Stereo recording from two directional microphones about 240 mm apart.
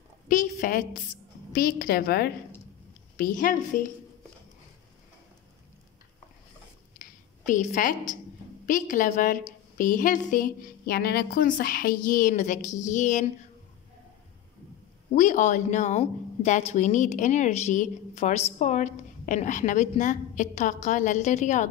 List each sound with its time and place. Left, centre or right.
0.3 s a woman's voice: left
7.0 s a sound: left
8.6 s a woman's voice: left
15.1 s a woman's voice: left